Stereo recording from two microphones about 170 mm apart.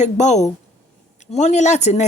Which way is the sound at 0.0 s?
45° left (ahead or behind).